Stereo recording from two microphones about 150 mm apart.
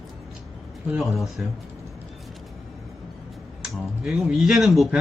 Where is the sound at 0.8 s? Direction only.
5° right (ahead or behind).